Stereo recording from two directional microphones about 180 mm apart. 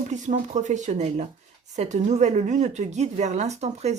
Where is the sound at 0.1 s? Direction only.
40° right (ahead or behind).